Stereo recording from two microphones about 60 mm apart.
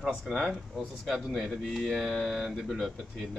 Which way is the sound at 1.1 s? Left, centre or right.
Centre.